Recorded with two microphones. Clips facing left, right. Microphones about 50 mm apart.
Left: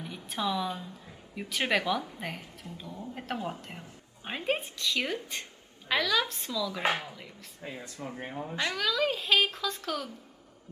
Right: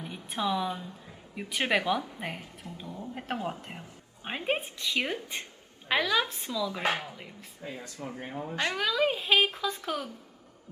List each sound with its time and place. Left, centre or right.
0.0 s speech: centre
2.8 s a sound: right
3.2 s speech: centre
6.9 s speech: centre
7.6 s speech: left
8.0 s speech: centre
8.5 s speech: centre